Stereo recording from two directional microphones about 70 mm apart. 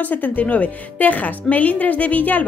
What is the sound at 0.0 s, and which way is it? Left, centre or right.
Speech, left.